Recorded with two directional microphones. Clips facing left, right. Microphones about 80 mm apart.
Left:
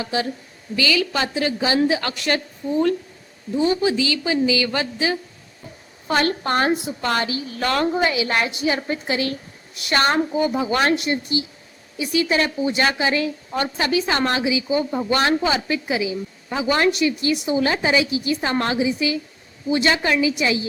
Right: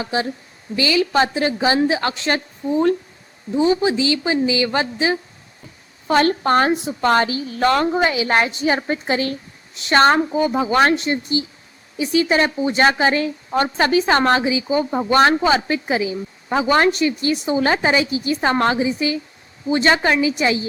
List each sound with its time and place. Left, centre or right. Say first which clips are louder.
0.0 s a woman's voice: right 2 dB; right